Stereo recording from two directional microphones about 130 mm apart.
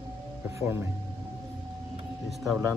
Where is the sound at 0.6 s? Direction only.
20° right (ahead or behind).